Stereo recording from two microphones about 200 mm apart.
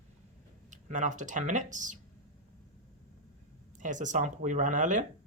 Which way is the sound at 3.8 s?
40° right (ahead or behind).